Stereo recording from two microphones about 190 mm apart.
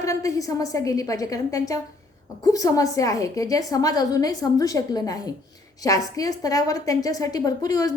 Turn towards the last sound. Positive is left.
turn(degrees=20)  # may be behind; listen again after turning